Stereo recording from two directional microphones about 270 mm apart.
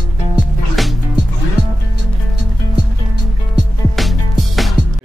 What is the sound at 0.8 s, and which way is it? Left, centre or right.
Music, centre.